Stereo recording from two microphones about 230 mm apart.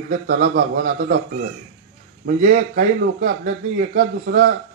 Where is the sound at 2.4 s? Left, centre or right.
Right.